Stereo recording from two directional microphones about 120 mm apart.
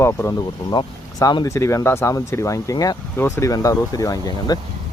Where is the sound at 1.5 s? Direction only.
25° left (ahead or behind).